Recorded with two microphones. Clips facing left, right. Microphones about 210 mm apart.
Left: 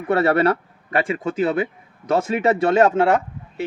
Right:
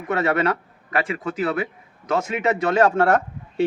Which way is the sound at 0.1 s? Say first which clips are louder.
Left 4 dB; 35° left (ahead or behind).